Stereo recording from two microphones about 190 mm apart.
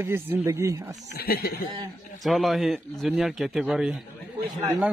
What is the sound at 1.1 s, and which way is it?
Speech, 55° left (ahead or behind).